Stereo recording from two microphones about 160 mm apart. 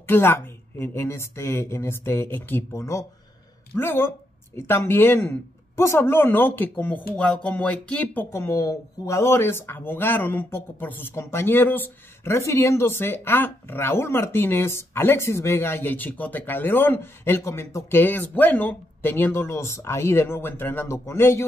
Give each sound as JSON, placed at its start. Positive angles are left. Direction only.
{"t": 0.0, "sound": "speech", "side_deg": 15}